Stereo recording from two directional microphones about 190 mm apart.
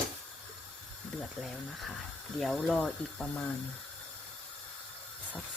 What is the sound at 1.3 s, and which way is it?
Speech, centre (ahead or behind).